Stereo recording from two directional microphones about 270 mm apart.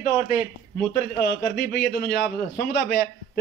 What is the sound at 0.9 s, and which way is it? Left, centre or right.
A man's voice, left.